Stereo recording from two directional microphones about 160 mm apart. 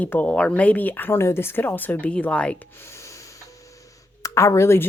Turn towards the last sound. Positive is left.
turn(degrees=15)  # may be behind; listen again after turning